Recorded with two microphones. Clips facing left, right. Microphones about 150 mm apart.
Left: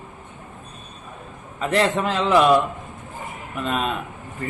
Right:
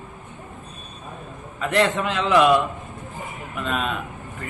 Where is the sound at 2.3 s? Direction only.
Centre (ahead or behind).